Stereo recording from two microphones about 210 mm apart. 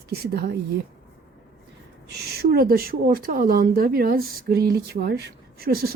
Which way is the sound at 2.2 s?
45° right (ahead or behind).